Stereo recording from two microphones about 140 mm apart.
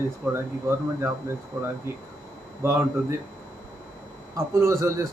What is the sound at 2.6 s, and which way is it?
Speech, 20° right (ahead or behind).